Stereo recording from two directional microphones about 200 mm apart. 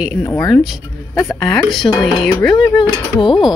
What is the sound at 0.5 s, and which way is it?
Speech, centre (ahead or behind).